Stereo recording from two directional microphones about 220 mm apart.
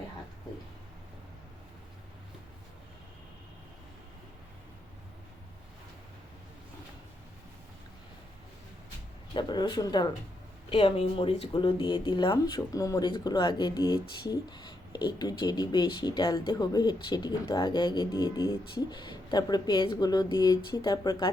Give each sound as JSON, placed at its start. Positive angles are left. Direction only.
{"t": 9.3, "sound": "speech", "side_deg": 20}